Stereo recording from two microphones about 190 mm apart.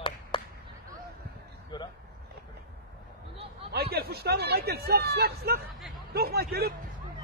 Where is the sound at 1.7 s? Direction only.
25° left (ahead or behind).